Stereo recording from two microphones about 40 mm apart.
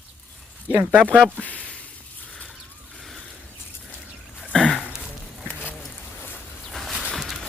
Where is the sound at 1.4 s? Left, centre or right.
Left.